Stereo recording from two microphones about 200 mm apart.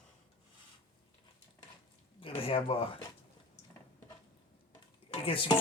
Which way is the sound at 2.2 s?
25° left (ahead or behind).